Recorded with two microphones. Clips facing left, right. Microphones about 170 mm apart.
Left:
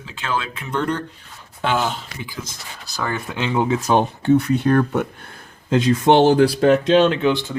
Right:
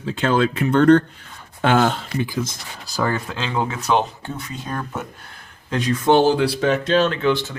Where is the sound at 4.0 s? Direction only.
65° left (ahead or behind).